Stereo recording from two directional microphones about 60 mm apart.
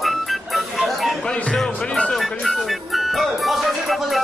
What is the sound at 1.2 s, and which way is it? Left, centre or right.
Music, centre.